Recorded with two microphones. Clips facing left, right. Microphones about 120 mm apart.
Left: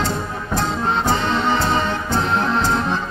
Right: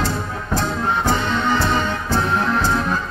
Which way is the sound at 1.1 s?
25° left (ahead or behind).